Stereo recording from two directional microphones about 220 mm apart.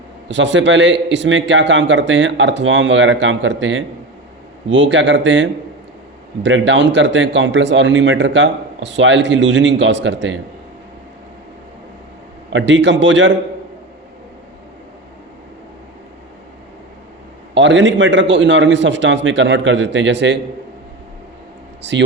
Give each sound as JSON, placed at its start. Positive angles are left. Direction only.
{"t": 0.3, "sound": "a man's voice", "side_deg": -55}
{"t": 12.5, "sound": "a man's voice", "side_deg": -55}
{"t": 17.5, "sound": "a man's voice", "side_deg": -55}
{"t": 21.8, "sound": "speech", "side_deg": -55}